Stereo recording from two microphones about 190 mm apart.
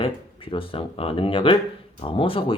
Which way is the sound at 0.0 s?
30° left (ahead or behind).